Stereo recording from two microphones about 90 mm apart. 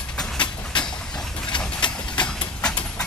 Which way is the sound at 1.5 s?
60° left (ahead or behind).